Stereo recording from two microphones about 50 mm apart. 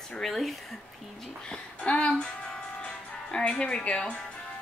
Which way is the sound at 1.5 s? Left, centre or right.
Left.